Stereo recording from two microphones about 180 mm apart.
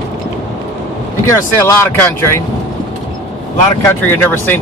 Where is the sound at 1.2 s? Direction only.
15° left (ahead or behind).